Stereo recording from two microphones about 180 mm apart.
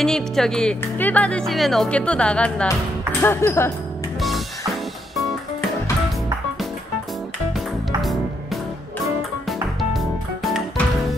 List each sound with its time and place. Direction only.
0.0 s speech: 5° left (ahead or behind)
7.5 s music: centre (ahead or behind)